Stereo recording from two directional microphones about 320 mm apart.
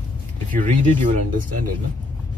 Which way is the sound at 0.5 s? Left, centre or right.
Right.